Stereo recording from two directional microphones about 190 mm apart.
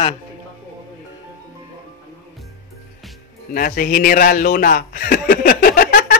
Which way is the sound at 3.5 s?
50° left (ahead or behind).